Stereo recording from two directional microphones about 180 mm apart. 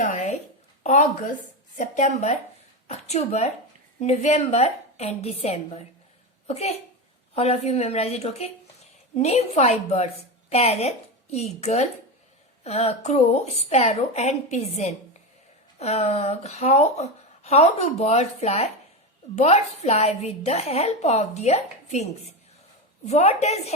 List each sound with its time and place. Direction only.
0.0 s a woman's voice: 45° left (ahead or behind)
23.0 s a woman's voice: 35° left (ahead or behind)